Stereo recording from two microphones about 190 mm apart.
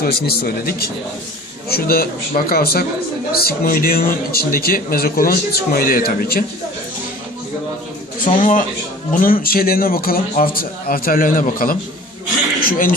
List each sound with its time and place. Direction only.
0.0 s speech: 55° left (ahead or behind)
8.4 s speech: 45° left (ahead or behind)